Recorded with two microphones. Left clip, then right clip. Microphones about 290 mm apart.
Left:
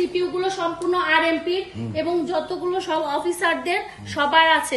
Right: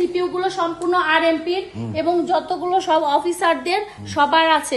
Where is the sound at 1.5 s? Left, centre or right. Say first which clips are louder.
Right 2 dB; right.